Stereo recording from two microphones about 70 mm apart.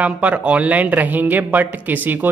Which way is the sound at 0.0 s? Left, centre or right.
Right.